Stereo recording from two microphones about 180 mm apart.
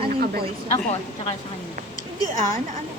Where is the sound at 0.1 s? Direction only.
55° right (ahead or behind).